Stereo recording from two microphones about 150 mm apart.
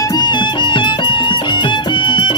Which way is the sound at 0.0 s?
25° left (ahead or behind).